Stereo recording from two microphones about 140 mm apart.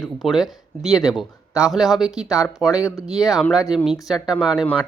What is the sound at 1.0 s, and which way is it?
Speech, 25° left (ahead or behind).